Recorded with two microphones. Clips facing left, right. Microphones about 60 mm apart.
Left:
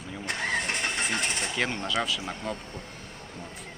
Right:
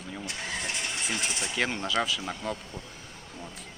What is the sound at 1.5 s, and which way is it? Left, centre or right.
Speech, centre.